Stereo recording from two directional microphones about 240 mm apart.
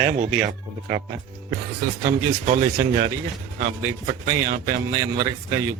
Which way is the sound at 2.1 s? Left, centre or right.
Right.